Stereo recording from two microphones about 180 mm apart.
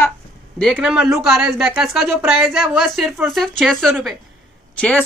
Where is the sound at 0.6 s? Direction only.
Centre (ahead or behind).